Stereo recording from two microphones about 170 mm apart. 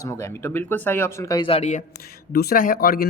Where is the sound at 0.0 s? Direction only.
15° left (ahead or behind).